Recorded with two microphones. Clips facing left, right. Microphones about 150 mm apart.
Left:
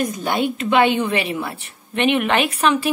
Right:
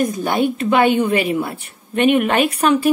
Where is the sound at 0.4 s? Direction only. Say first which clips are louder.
Right 2 dB; 45° right (ahead or behind).